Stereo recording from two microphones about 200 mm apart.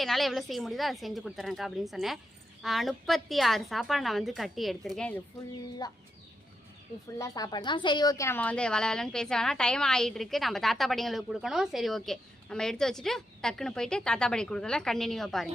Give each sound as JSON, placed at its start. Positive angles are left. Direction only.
{"t": 0.0, "sound": "a woman's voice", "side_deg": 0}
{"t": 5.8, "sound": "speech", "side_deg": 20}
{"t": 7.2, "sound": "a woman's voice", "side_deg": 20}